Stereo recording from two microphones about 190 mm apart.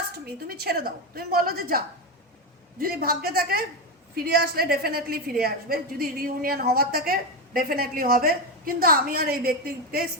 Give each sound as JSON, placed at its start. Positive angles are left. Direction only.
{"t": 0.4, "sound": "a woman's voice", "side_deg": -55}